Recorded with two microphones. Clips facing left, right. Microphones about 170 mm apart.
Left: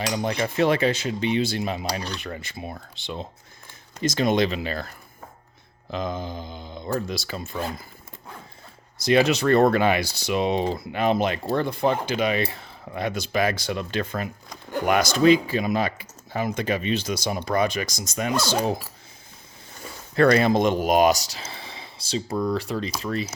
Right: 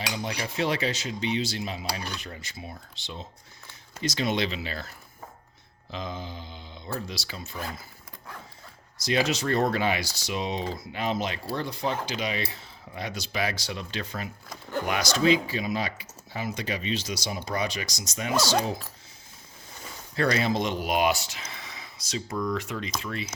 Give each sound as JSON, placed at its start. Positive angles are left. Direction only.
{"t": 0.4, "sound": "speech", "side_deg": 55}
{"t": 5.9, "sound": "speech", "side_deg": 50}
{"t": 9.0, "sound": "speech", "side_deg": 60}
{"t": 20.1, "sound": "speech", "side_deg": 55}